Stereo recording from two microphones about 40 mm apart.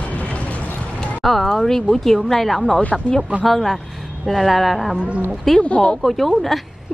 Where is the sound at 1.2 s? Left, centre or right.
Centre.